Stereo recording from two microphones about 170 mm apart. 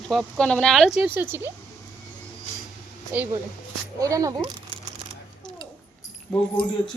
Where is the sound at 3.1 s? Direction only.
10° right (ahead or behind).